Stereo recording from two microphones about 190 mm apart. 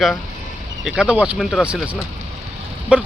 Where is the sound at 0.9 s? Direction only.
5° right (ahead or behind).